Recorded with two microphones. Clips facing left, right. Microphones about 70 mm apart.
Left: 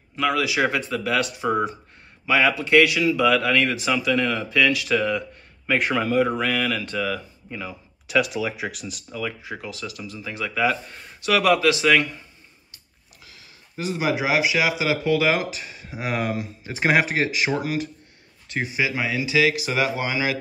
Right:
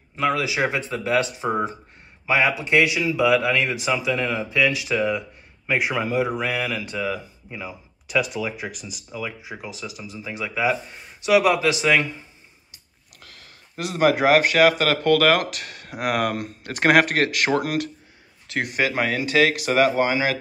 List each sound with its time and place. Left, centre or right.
0.1 s speech: right
5.7 s speech: centre
8.1 s speech: centre; by 12.3 s right
13.2 s speech: right